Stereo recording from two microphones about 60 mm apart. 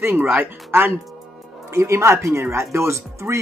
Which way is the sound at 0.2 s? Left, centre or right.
Right.